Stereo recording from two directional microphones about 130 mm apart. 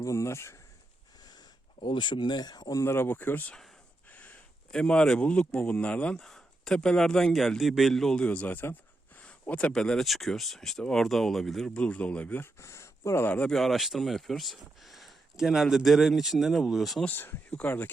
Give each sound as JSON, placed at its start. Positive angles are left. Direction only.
{"t": 0.0, "sound": "speech", "side_deg": 20}
{"t": 1.8, "sound": "speech", "side_deg": 35}
{"t": 17.1, "sound": "speech", "side_deg": 15}